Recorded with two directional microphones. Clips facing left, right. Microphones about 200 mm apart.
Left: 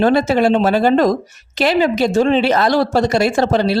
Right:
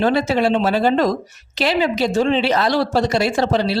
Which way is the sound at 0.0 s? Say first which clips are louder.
Left 4 dB; 45° left (ahead or behind).